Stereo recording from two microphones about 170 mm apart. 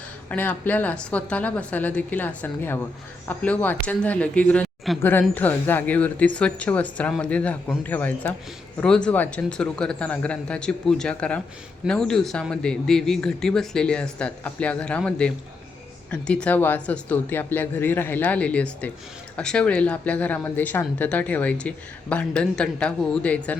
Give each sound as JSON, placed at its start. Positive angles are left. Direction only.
{"t": 0.3, "sound": "speech", "side_deg": 10}